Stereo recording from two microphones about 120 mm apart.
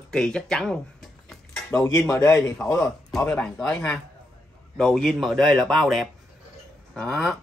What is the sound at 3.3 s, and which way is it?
A man's voice, 5° left (ahead or behind).